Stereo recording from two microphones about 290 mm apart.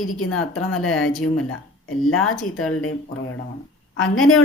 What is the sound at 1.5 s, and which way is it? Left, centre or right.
A woman's voice, left.